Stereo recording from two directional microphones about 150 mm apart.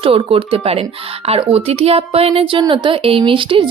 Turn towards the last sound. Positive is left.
turn(degrees=-35)  # may be behind; listen again after turning